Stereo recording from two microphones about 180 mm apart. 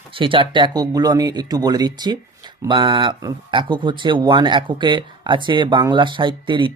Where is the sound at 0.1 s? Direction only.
30° right (ahead or behind).